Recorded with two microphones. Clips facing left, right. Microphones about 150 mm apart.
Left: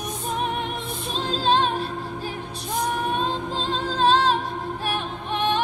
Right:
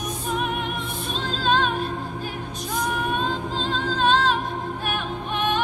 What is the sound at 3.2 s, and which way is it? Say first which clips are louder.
Music: even; 35° left (ahead or behind).